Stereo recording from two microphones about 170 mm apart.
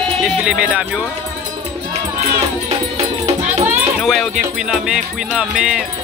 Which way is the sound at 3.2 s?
40° right (ahead or behind).